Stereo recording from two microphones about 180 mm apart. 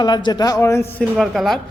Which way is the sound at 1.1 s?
Centre (ahead or behind).